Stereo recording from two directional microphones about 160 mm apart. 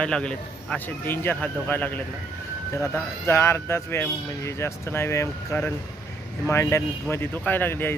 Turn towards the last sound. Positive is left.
turn(degrees=10)  # may be behind; listen again after turning